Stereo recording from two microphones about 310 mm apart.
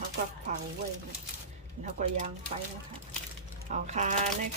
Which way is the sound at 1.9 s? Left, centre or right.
Right.